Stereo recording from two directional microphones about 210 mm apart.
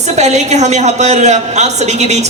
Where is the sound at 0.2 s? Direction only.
35° right (ahead or behind).